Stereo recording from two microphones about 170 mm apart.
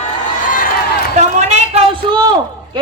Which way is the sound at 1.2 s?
45° right (ahead or behind).